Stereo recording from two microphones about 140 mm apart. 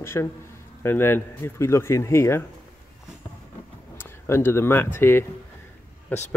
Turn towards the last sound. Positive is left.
turn(degrees=15)  # may be behind; listen again after turning